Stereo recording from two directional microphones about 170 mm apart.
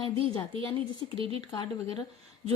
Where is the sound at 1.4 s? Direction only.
25° left (ahead or behind).